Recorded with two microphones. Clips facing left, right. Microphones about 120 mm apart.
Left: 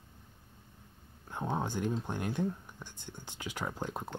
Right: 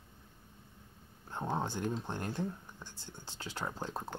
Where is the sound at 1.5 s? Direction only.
10° left (ahead or behind).